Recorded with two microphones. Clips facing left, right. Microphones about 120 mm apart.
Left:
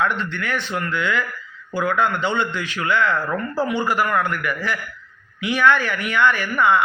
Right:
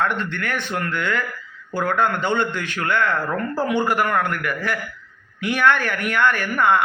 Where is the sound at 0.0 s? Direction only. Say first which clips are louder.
Even; 50° right (ahead or behind).